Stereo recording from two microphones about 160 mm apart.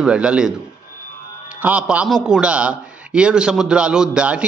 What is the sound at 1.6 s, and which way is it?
A man's voice, 10° right (ahead or behind).